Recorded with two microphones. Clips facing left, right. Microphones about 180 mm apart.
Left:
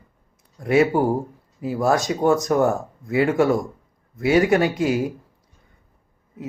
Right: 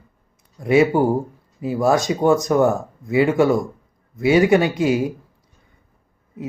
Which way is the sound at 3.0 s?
Centre (ahead or behind).